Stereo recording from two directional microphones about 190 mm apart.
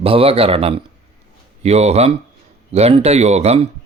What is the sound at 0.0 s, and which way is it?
Speech, 30° right (ahead or behind).